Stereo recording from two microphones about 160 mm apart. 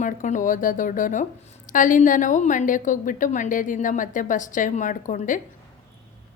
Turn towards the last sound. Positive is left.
turn(degrees=55)  # may be behind; listen again after turning